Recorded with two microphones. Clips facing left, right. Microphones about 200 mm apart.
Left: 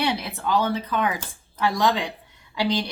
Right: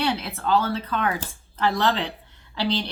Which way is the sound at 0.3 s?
15° left (ahead or behind).